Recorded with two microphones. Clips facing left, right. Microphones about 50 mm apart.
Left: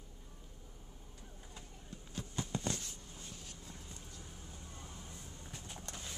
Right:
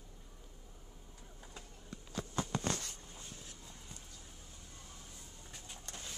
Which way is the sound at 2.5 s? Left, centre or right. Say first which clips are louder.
Right 2 dB; right.